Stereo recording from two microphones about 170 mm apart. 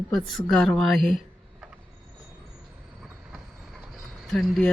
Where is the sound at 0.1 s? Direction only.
Centre (ahead or behind).